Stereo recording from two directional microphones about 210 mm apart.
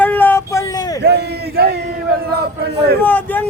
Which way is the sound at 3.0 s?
10° left (ahead or behind).